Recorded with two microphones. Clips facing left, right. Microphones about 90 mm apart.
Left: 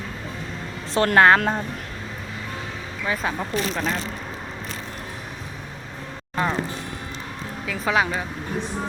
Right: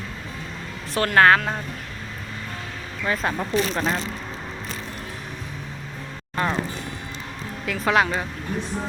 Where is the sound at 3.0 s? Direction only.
5° left (ahead or behind).